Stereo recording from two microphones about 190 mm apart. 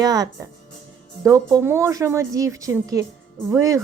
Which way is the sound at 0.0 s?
20° right (ahead or behind).